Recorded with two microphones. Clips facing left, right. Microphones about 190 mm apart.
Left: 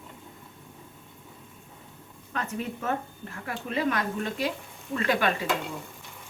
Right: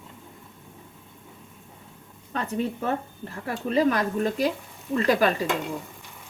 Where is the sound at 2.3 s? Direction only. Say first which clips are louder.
Right 5 dB; 35° right (ahead or behind).